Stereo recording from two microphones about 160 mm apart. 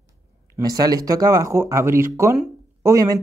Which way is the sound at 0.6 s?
25° right (ahead or behind).